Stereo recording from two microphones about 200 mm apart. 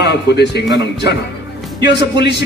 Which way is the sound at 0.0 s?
55° left (ahead or behind).